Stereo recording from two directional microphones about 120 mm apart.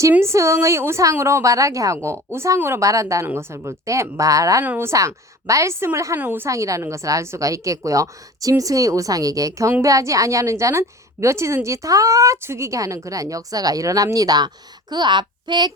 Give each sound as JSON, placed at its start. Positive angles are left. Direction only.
{"t": 0.1, "sound": "a woman's voice", "side_deg": -20}
{"t": 4.6, "sound": "a woman's voice", "side_deg": -15}
{"t": 4.9, "sound": "a woman's voice", "side_deg": -25}